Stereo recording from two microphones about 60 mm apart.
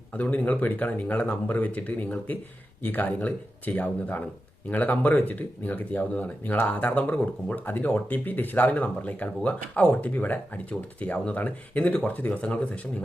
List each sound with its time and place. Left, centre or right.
0.1 s speech: left